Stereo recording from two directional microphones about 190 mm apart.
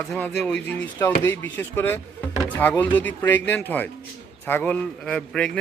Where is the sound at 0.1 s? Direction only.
5° left (ahead or behind).